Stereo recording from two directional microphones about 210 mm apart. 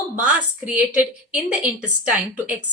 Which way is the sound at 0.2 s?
5° right (ahead or behind).